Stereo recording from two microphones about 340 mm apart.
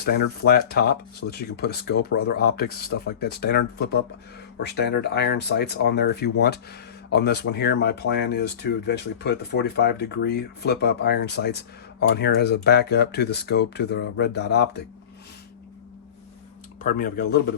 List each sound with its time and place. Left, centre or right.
0.0 s speech: left
16.8 s speech: left